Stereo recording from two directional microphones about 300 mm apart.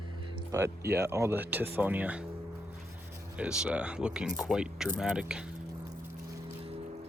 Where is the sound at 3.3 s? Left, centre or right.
Centre.